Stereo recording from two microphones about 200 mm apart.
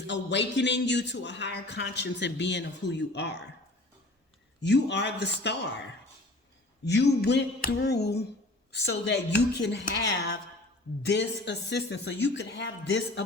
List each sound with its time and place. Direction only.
0.1 s a man's voice: 60° left (ahead or behind)
4.6 s a man's voice: 60° left (ahead or behind)
6.8 s a man's voice: 60° left (ahead or behind)